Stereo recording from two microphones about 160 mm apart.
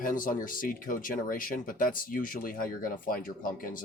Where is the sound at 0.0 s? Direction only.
60° left (ahead or behind).